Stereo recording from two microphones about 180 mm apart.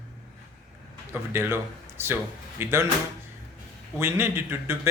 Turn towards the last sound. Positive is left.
turn(degrees=-15)  # may be behind; listen again after turning